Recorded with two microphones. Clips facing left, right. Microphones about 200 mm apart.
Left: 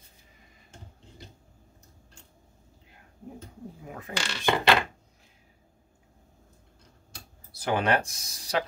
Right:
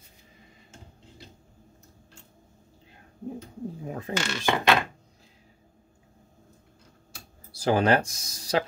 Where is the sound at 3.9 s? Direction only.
30° right (ahead or behind).